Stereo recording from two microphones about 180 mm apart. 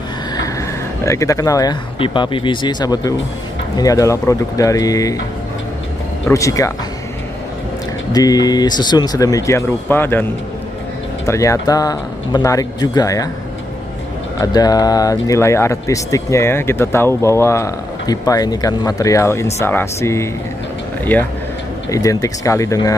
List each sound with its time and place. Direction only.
0.6 s speech: 15° left (ahead or behind)
6.2 s speech: 15° left (ahead or behind)
8.1 s speech: 20° left (ahead or behind)
11.2 s speech: 15° left (ahead or behind)
14.4 s speech: 20° left (ahead or behind)